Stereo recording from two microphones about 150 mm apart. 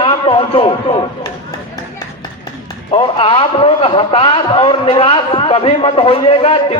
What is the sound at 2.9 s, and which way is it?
A man's voice, 35° left (ahead or behind).